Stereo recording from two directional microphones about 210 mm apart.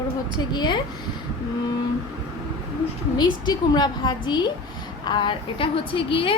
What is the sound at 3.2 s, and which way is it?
A woman's voice, 20° left (ahead or behind).